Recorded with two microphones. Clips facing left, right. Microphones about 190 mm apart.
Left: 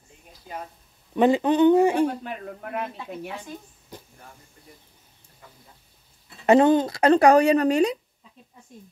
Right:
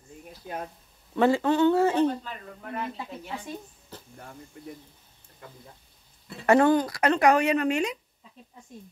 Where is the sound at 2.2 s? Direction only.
60° left (ahead or behind).